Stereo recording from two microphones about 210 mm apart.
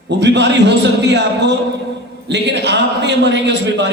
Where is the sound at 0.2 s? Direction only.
55° right (ahead or behind).